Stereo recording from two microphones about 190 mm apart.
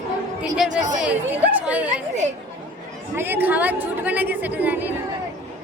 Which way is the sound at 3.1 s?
10° right (ahead or behind).